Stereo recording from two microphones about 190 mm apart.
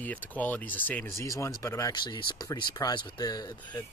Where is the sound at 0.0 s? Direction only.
10° left (ahead or behind).